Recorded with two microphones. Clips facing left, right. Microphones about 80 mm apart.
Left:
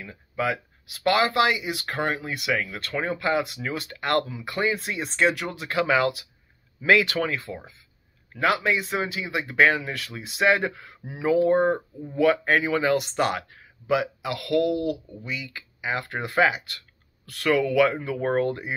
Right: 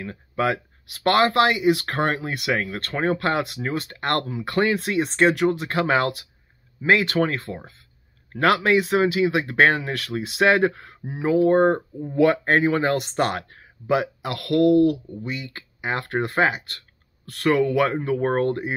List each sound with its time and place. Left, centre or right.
0.0 s speech: right
3.6 s speech: right
6.8 s speech: right
8.3 s speech: right
11.1 s speech: right
11.4 s speech: right
12.5 s speech: right